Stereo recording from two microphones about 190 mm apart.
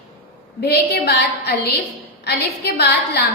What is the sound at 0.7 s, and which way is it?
A woman's voice, 55° left (ahead or behind).